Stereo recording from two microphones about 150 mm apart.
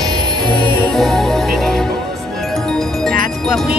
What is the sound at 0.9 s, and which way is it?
Music, centre (ahead or behind).